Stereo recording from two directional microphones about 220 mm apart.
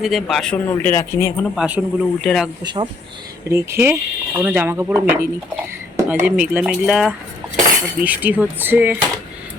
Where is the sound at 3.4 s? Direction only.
15° right (ahead or behind).